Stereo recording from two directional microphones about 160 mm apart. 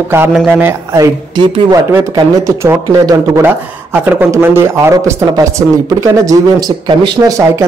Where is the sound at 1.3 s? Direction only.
30° right (ahead or behind).